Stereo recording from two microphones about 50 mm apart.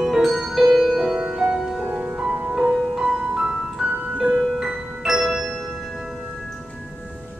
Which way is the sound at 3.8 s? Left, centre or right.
Right.